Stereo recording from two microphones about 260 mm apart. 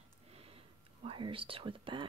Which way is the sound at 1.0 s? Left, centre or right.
Centre.